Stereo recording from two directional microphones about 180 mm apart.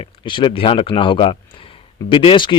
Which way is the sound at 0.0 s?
25° left (ahead or behind).